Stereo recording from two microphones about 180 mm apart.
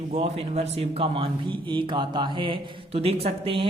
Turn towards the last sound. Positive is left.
turn(degrees=-30)  # may be behind; listen again after turning